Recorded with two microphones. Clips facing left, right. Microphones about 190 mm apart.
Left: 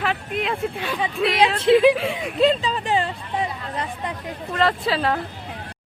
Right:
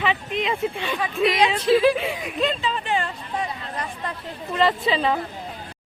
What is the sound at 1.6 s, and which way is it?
Speech, 20° left (ahead or behind).